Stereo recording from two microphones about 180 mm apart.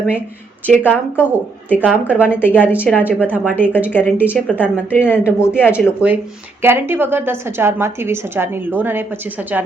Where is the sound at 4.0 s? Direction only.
10° left (ahead or behind).